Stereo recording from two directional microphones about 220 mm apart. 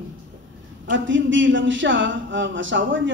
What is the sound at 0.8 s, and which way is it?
Speech, 60° right (ahead or behind).